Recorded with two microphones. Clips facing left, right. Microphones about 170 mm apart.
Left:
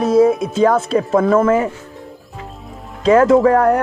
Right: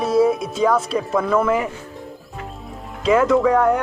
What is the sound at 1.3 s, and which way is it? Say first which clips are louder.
Speech: left 4 dB; 40° left (ahead or behind).